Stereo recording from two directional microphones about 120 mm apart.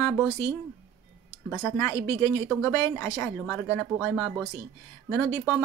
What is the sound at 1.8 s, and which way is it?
Speech, 25° left (ahead or behind).